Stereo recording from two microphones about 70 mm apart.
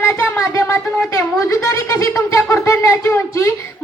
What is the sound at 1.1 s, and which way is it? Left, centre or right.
Speech, left.